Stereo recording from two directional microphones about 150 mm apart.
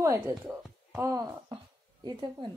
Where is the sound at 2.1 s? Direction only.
30° right (ahead or behind).